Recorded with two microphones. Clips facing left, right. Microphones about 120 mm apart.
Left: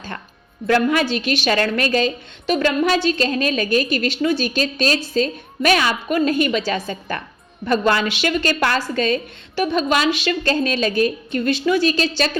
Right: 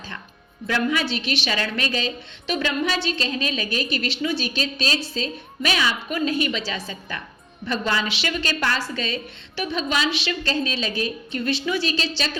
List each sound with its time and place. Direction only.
0.7 s a woman's voice: 50° left (ahead or behind)